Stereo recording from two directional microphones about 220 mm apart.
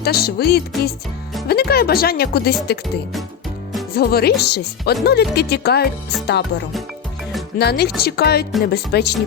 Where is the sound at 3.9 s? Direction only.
45° left (ahead or behind).